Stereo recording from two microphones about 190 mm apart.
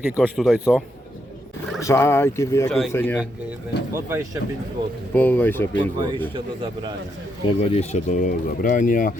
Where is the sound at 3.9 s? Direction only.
15° right (ahead or behind).